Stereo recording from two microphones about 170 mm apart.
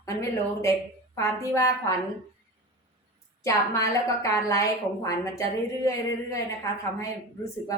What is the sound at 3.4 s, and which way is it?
A woman's voice, 20° left (ahead or behind).